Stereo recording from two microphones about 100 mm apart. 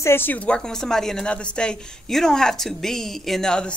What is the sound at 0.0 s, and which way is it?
A woman's voice, 20° left (ahead or behind).